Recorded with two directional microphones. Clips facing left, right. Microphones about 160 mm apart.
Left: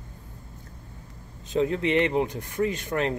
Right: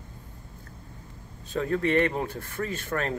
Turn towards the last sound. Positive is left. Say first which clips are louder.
# left 4 dB
turn(degrees=15)  # may be behind; listen again after turning